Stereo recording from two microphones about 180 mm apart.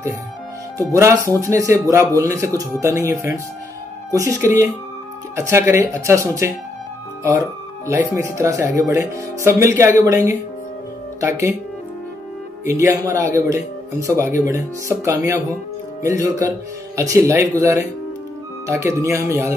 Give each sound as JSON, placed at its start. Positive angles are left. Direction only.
{"t": 0.7, "sound": "speech", "side_deg": -15}
{"t": 12.6, "sound": "speech", "side_deg": -15}